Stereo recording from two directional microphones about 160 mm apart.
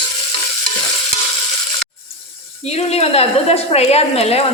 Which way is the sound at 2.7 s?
40° left (ahead or behind).